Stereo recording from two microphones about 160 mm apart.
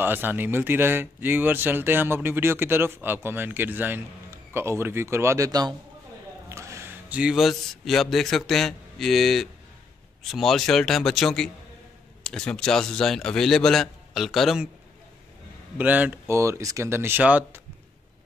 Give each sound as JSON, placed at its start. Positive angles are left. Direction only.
{"t": 0.0, "sound": "a man's voice", "side_deg": -10}
{"t": 15.8, "sound": "speech", "side_deg": -10}